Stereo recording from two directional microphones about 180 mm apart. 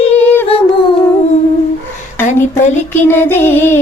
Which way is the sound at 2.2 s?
40° left (ahead or behind).